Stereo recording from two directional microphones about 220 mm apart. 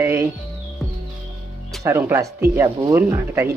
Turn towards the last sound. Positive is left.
turn(degrees=-10)  # may be behind; listen again after turning